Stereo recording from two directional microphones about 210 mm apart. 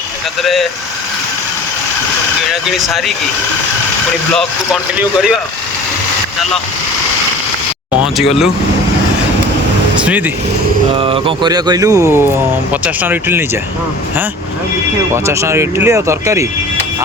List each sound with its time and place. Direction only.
0.4 s speech: centre (ahead or behind)
2.5 s speech: centre (ahead or behind)
4.4 s speech: centre (ahead or behind)
8.0 s speech: centre (ahead or behind)
10.0 s speech: 5° right (ahead or behind)
10.9 s speech: 25° right (ahead or behind); by 13.4 s 10° right (ahead or behind)
15.1 s speech: 15° right (ahead or behind)